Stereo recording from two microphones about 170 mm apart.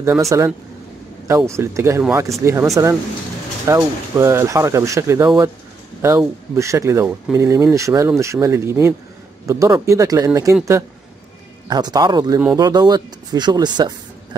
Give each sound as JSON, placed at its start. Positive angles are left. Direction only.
{"t": 0.3, "sound": "speech", "side_deg": -15}